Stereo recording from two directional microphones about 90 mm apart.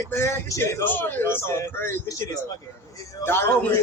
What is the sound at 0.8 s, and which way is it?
Speech, 20° left (ahead or behind).